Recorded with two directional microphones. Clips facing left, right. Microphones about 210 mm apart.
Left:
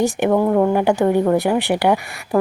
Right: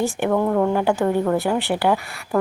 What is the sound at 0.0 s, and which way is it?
Speech, 15° left (ahead or behind).